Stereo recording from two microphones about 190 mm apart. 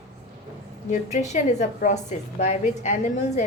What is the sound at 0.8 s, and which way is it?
A woman's voice, 40° left (ahead or behind).